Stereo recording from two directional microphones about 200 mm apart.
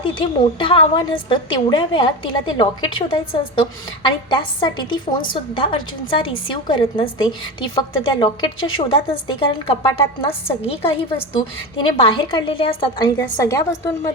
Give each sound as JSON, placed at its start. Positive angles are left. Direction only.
{"t": 0.0, "sound": "a woman's voice", "side_deg": 25}